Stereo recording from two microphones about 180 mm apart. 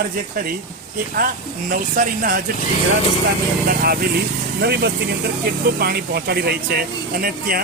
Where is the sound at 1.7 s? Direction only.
50° right (ahead or behind).